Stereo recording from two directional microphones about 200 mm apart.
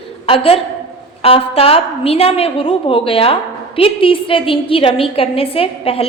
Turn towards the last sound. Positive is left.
turn(degrees=30)  # may be behind; listen again after turning